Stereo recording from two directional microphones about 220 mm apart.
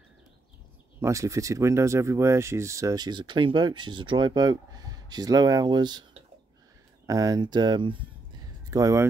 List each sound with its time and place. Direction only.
1.0 s speech: 15° right (ahead or behind)
7.1 s speech: 15° right (ahead or behind)